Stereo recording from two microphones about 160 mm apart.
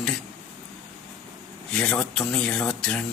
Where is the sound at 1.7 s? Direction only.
5° left (ahead or behind).